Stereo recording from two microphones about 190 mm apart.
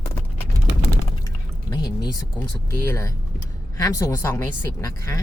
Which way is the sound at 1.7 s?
20° left (ahead or behind).